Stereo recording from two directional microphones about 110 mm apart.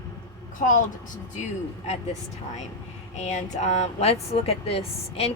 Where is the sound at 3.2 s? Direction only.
90° left.